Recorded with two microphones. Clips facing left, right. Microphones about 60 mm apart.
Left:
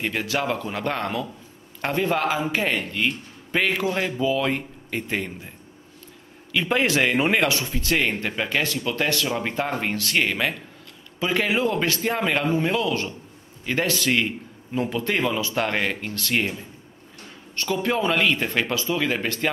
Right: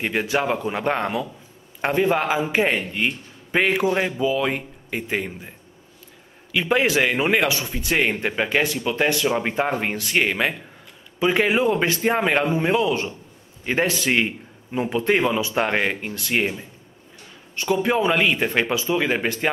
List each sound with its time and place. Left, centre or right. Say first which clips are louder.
0.0 s speech: right 3 dB; centre
6.5 s speech: right 2 dB; centre